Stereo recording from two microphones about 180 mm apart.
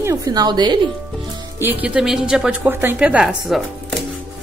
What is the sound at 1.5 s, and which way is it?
A woman's voice, 10° right (ahead or behind).